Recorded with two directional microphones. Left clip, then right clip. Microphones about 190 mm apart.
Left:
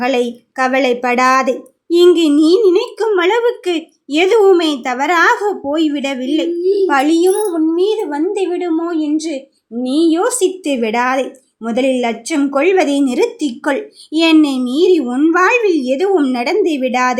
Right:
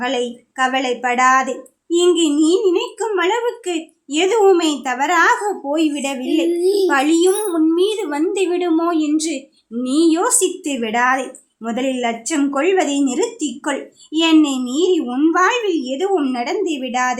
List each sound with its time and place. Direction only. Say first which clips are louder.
0.0 s a woman's voice: left 5 dB; 20° left (ahead or behind)